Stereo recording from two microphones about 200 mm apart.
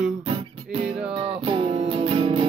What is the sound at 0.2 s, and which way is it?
Music, 30° right (ahead or behind).